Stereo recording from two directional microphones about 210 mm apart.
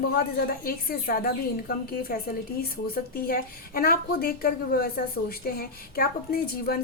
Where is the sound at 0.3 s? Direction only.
45° left (ahead or behind).